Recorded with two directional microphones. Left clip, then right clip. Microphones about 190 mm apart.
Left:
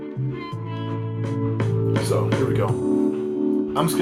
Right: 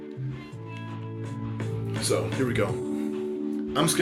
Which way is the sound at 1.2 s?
40° left (ahead or behind).